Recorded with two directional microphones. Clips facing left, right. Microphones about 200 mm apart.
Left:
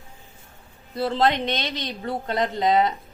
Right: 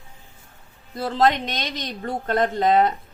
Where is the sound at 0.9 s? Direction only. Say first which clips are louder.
Right 1 dB; 45° right (ahead or behind).